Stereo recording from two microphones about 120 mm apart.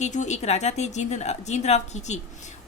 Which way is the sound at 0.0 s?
80° left.